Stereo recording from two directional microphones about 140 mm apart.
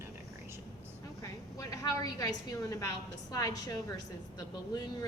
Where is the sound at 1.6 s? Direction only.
25° left (ahead or behind).